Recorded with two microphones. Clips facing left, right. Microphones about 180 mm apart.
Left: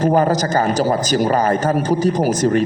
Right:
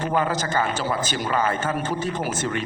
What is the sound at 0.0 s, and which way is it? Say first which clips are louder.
A man's voice: left 8 dB; 40° left (ahead or behind).